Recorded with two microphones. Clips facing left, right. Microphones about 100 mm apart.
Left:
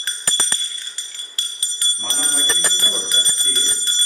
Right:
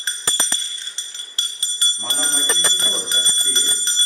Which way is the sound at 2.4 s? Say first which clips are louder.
Left 1 dB; 25° right (ahead or behind).